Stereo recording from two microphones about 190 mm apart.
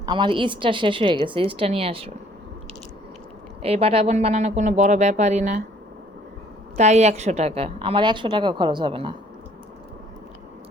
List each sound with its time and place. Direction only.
0.0 s a woman's voice: 25° right (ahead or behind)
3.6 s speech: 30° right (ahead or behind)
6.7 s a woman's voice: 35° right (ahead or behind)